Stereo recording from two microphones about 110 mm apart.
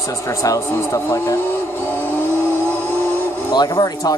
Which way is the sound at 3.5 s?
40° left (ahead or behind).